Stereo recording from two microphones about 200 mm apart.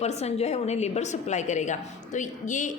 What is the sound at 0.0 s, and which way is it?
A woman's voice, 35° left (ahead or behind).